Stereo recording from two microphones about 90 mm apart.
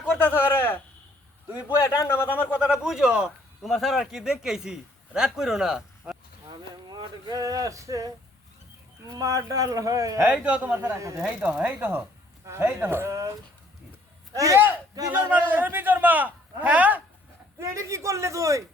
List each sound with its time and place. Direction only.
0.2 s speech: 25° left (ahead or behind)
1.7 s a man's voice: 35° left (ahead or behind)
2.6 s a man's voice: 5° right (ahead or behind)
6.9 s speech: 50° right (ahead or behind)
10.2 s a man's voice: 15° right (ahead or behind); by 13.3 s 30° right (ahead or behind)
14.3 s speech: 40° right (ahead or behind)
15.3 s a man's voice: 20° right (ahead or behind)
17.6 s speech: 35° right (ahead or behind)